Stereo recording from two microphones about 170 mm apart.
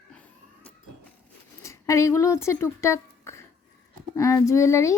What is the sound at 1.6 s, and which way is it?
A child's voice, 20° left (ahead or behind).